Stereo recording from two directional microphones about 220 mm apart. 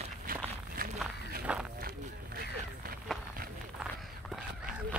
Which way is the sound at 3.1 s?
Centre (ahead or behind).